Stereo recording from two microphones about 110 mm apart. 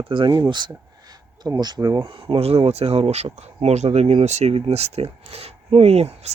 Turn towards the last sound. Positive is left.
turn(degrees=-70)  # may be behind; listen again after turning